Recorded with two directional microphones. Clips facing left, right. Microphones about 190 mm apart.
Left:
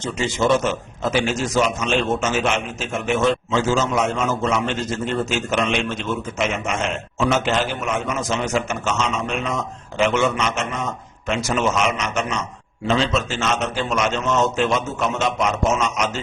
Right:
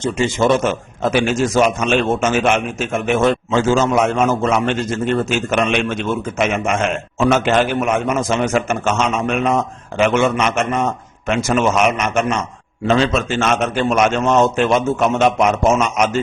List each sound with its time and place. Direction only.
0.0 s a man's voice: 50° right (ahead or behind)